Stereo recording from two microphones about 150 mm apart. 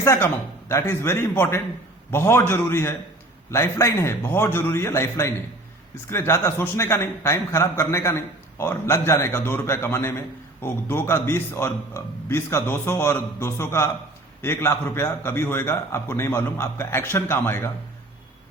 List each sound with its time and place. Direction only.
0.0 s a man's voice: 15° left (ahead or behind)